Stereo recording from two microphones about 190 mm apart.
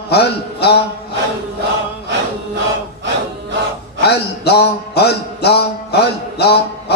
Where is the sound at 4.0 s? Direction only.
60° left (ahead or behind).